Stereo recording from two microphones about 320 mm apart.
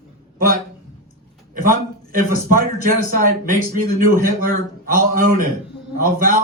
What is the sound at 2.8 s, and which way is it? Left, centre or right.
A man's voice, right.